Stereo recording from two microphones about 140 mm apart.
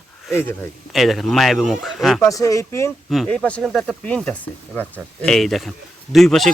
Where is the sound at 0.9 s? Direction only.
Centre (ahead or behind).